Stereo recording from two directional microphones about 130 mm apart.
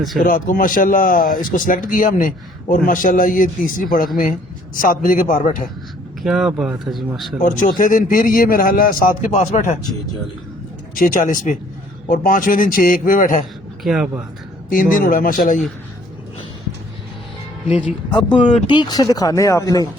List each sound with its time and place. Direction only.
0.2 s a man's voice: 90° left
6.2 s speech: 5° right (ahead or behind)
7.4 s a man's voice: 90° left
10.9 s a man's voice: 90° left
13.8 s speech: 5° right (ahead or behind)
14.7 s a man's voice: 90° left
17.8 s speech: 35° left (ahead or behind)
18.3 s speech: 60° left (ahead or behind)
18.7 s speech: 35° left (ahead or behind)